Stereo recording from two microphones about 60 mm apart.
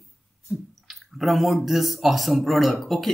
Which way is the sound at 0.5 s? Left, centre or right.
Right.